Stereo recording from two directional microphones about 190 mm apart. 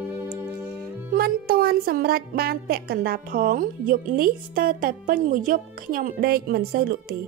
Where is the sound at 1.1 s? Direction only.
55° right (ahead or behind).